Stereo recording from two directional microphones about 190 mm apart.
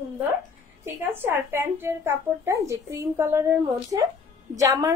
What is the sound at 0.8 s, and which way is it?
A woman's voice, 10° right (ahead or behind).